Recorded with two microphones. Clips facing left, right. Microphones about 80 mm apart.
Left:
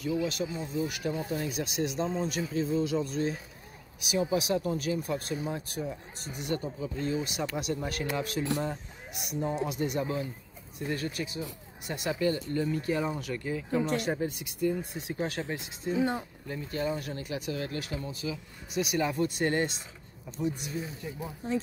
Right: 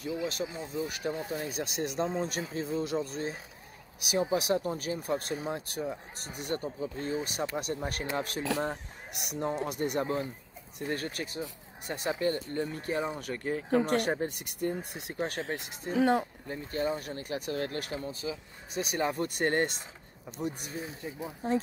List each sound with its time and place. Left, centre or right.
0.0 s speech: right
4.0 s speech: right
6.4 s speech: right
9.1 s speech: right
11.8 s speech: right
16.4 s speech: right
17.9 s speech: right
19.2 s speech: right